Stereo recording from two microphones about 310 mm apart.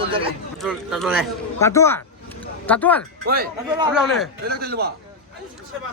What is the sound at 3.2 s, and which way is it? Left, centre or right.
A man's voice, right.